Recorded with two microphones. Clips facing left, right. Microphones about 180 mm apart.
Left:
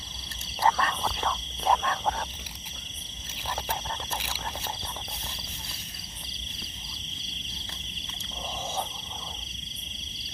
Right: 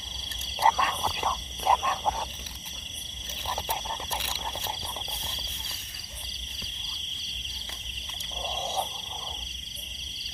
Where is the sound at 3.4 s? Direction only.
10° right (ahead or behind).